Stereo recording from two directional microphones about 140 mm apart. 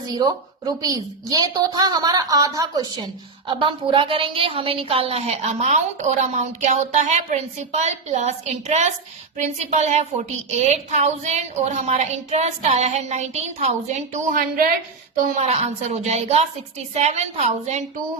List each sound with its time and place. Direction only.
0.1 s a woman's voice: 30° right (ahead or behind); by 14.7 s 90° right
15.4 s a woman's voice: 50° right (ahead or behind)